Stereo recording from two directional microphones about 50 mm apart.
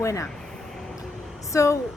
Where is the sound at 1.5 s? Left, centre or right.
Left.